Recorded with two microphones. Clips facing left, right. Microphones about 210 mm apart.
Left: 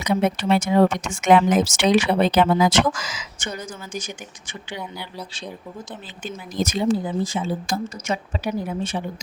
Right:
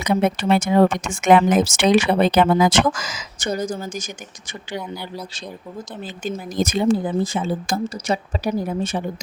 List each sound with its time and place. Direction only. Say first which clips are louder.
0.0 s speech: right 2 dB; 55° right (ahead or behind)
6.2 s speech: right 3 dB; 45° right (ahead or behind)
8.0 s a woman's voice: right 3 dB; 35° right (ahead or behind)